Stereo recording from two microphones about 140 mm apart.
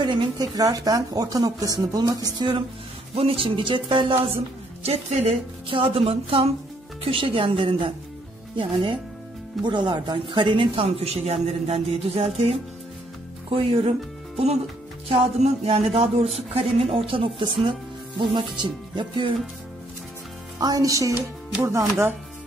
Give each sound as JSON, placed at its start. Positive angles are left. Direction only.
{"t": 0.0, "sound": "a woman's voice", "side_deg": -30}
{"t": 4.8, "sound": "a man's voice", "side_deg": -45}
{"t": 20.5, "sound": "a woman's voice", "side_deg": -25}